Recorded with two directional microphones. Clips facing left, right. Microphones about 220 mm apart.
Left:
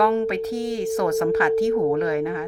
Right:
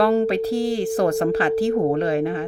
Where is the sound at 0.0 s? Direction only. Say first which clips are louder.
Right 2 dB; 35° right (ahead or behind).